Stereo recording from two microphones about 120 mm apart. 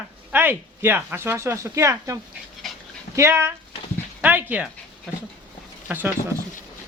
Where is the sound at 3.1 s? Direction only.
20° right (ahead or behind).